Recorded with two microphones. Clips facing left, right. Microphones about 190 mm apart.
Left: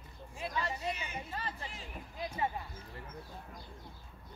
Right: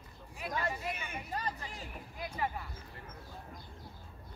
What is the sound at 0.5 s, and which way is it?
Speech, 50° right (ahead or behind).